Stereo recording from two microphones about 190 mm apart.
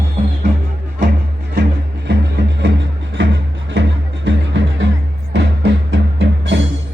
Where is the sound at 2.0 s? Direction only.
65° right (ahead or behind).